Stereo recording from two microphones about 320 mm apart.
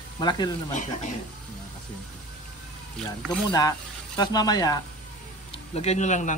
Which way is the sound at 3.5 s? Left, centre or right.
Centre.